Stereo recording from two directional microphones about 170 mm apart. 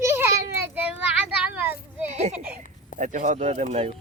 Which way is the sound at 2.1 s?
45° right (ahead or behind).